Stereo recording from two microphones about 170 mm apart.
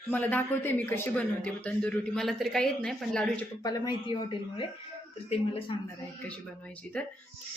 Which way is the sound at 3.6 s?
25° left (ahead or behind).